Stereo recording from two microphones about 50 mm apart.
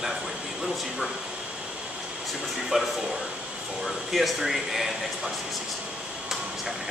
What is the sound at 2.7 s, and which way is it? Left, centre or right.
Speech, centre.